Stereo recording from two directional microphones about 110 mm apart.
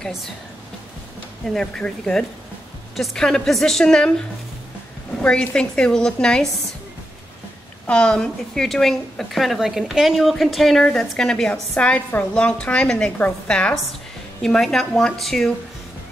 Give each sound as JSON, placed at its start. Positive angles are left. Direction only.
{"t": 1.5, "sound": "a woman's voice", "side_deg": 5}
{"t": 5.2, "sound": "a woman's voice", "side_deg": 10}
{"t": 7.8, "sound": "a woman's voice", "side_deg": 10}